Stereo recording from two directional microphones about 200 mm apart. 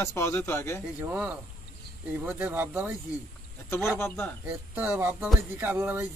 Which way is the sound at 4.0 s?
10° left (ahead or behind).